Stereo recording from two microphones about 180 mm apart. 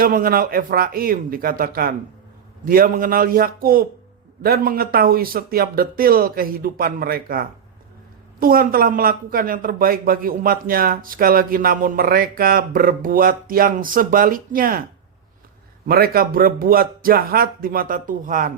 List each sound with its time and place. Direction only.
0.0 s a man's voice: 55° right (ahead or behind)
15.9 s speech: 55° right (ahead or behind)